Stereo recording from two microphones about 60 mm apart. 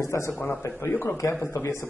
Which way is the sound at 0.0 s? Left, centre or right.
Left.